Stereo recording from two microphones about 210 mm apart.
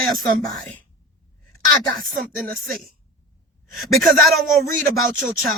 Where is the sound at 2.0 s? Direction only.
Centre (ahead or behind).